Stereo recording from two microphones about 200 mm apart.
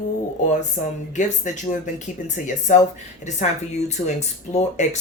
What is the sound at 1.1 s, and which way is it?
Speech, 40° left (ahead or behind).